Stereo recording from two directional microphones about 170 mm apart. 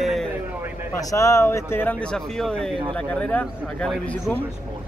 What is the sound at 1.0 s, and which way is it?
Speech, 20° left (ahead or behind).